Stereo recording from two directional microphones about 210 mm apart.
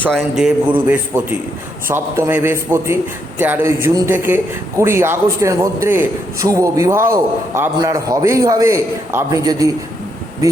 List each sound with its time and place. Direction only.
0.0 s a man's voice: centre (ahead or behind); by 9.7 s 15° right (ahead or behind)